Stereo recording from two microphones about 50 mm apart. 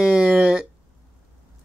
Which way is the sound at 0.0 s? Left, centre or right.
Centre.